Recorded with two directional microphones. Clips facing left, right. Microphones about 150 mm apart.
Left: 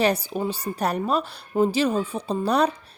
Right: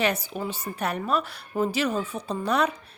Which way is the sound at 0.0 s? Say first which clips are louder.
Left 4 dB; 35° left (ahead or behind).